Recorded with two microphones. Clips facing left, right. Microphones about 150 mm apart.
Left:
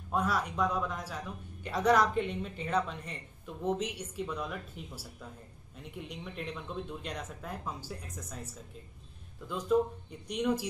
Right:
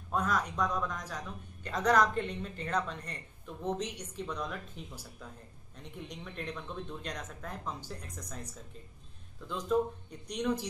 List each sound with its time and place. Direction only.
0.1 s speech: 10° left (ahead or behind)
9.7 s speech: 5° left (ahead or behind)